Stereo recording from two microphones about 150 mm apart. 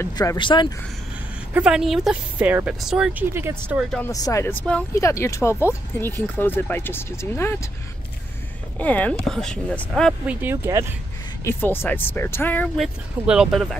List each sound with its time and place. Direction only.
0.0 s speech: 20° left (ahead or behind)
1.5 s speech: 5° right (ahead or behind)
4.0 s speech: 20° left (ahead or behind)
4.9 s speech: 20° left (ahead or behind)
8.7 s speech: 10° left (ahead or behind)
10.2 s speech: 15° right (ahead or behind)
11.4 s speech: 15° left (ahead or behind)
12.7 s speech: 5° right (ahead or behind)